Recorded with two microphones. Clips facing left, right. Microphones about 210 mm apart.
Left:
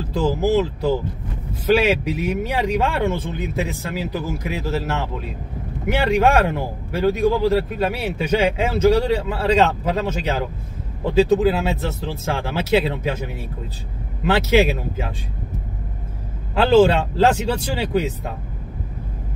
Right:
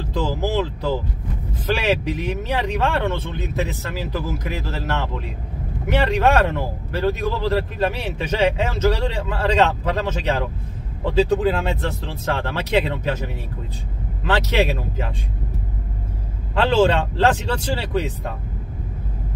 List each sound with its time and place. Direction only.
0.1 s speech: 10° left (ahead or behind)
14.2 s speech: 10° left (ahead or behind)
16.5 s speech: 10° left (ahead or behind)